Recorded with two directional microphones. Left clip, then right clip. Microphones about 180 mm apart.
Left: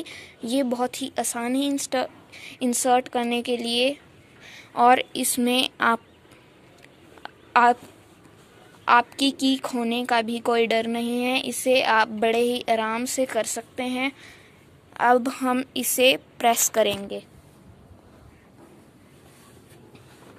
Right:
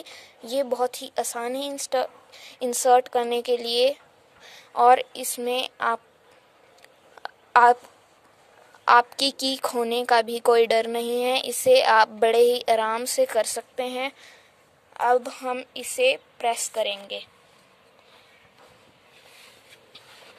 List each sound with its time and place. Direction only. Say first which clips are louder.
0.0 s a woman's voice: left 5 dB; 10° right (ahead or behind)
7.2 s a sound: right 2 dB; 25° right (ahead or behind)
8.8 s a woman's voice: right 1 dB; 30° right (ahead or behind)
15.0 s a woman's voice: left 2 dB; centre (ahead or behind)